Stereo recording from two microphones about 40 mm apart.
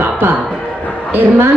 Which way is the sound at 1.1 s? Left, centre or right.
Right.